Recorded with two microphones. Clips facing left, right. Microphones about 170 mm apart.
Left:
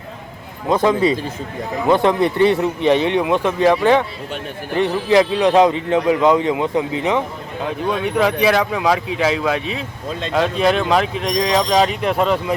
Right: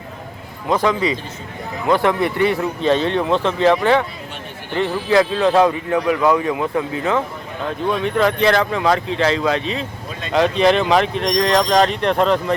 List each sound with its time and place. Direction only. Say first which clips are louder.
0.7 s a man's voice: left 3 dB; 20° left (ahead or behind); by 12.5 s 5° left (ahead or behind)